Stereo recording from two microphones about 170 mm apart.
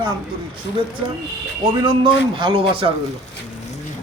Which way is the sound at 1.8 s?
30° right (ahead or behind).